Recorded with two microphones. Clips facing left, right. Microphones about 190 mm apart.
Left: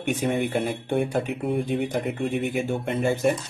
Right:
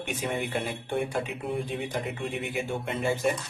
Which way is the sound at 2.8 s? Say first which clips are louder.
Left 4 dB; 50° left (ahead or behind).